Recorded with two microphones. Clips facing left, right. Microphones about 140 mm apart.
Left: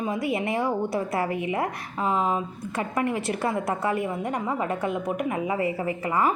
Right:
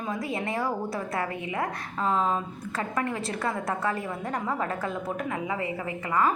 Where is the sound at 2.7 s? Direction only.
20° left (ahead or behind).